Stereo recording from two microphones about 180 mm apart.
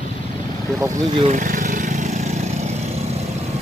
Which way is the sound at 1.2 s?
45° right (ahead or behind).